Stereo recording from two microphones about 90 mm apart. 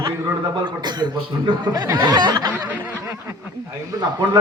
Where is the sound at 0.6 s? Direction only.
55° right (ahead or behind).